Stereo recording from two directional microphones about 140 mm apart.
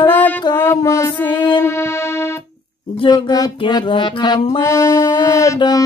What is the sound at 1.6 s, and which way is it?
Keyboard, 20° left (ahead or behind).